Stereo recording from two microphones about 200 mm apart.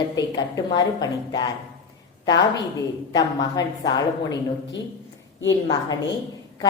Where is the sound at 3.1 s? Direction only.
20° left (ahead or behind).